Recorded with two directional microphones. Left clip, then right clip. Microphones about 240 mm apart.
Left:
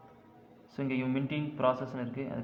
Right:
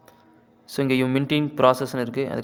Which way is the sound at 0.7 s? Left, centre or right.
Right.